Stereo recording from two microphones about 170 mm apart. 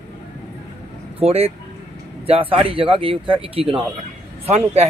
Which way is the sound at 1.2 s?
35° right (ahead or behind).